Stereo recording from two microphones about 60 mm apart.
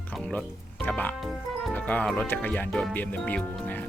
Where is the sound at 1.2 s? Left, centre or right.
Centre.